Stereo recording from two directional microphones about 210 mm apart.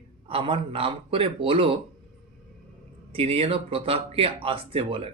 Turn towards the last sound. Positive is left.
turn(degrees=-25)  # may be behind; listen again after turning